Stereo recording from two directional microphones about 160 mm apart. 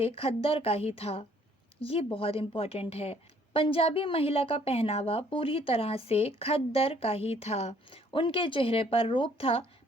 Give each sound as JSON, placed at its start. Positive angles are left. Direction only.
{"t": 0.0, "sound": "a woman's voice", "side_deg": 35}